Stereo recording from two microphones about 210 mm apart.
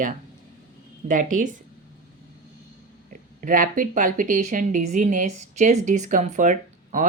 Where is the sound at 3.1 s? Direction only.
40° right (ahead or behind).